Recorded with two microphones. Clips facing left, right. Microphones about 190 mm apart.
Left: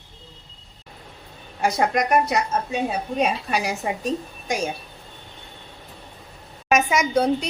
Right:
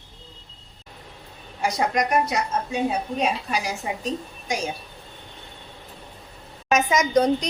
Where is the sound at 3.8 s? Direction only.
65° left (ahead or behind).